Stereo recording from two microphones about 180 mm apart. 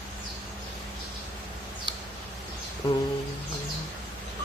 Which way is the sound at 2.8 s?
25° left (ahead or behind).